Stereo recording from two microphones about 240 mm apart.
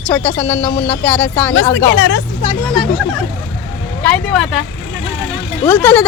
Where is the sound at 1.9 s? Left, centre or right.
Left.